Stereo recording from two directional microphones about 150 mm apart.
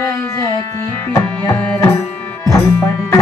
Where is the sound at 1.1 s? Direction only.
20° left (ahead or behind).